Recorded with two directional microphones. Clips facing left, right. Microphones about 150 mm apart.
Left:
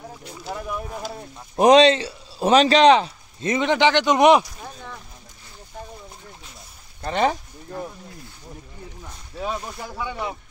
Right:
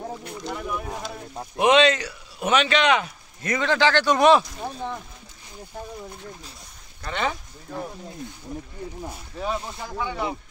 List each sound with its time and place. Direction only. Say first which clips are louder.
1.6 s speech: left 4 dB; 35° left (ahead or behind); by 4.5 s 15° left (ahead or behind)
7.0 s speech: left 6 dB; 35° left (ahead or behind)
9.4 s speech: even; 5° left (ahead or behind)